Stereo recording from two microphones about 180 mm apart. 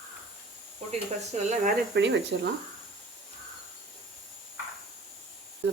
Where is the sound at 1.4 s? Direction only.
40° right (ahead or behind).